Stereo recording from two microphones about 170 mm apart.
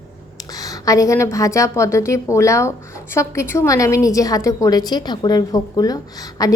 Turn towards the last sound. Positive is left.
turn(degrees=20)  # may be behind; listen again after turning